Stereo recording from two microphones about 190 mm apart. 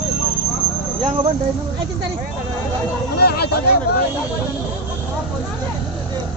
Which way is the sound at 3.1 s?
55° left (ahead or behind).